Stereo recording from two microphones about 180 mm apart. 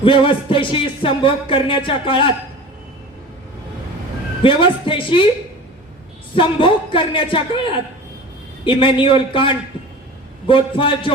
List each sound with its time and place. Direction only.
0.0 s speech: 30° left (ahead or behind)
4.4 s speech: 30° left (ahead or behind)
6.3 s speech: 30° left (ahead or behind)
8.6 s speech: 30° left (ahead or behind)